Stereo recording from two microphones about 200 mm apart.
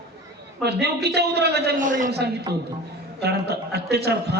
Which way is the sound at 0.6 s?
55° right (ahead or behind).